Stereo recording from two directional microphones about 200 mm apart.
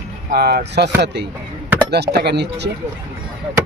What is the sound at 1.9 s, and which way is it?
Speech, 55° right (ahead or behind).